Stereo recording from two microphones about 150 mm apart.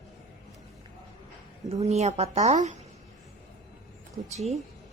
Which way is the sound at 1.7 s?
45° right (ahead or behind).